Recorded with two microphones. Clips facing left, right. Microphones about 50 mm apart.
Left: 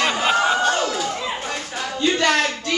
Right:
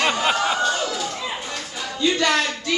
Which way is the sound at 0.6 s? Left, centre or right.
Left.